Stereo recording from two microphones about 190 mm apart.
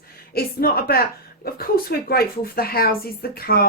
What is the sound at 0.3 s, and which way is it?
A woman's voice, 55° left (ahead or behind).